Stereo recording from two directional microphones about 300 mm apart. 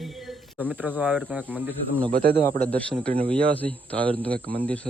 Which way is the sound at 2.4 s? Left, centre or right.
Centre.